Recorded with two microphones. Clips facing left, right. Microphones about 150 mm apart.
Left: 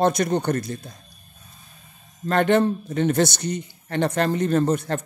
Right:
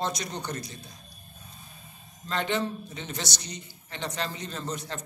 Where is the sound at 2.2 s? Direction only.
55° left (ahead or behind).